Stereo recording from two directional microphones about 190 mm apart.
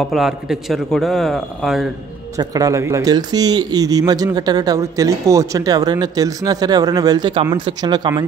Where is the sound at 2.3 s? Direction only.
20° right (ahead or behind).